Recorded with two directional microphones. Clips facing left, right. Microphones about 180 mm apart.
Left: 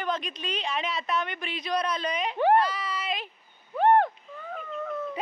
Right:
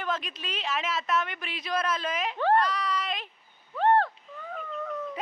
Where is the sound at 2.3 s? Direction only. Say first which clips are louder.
Left 3 dB; 15° left (ahead or behind).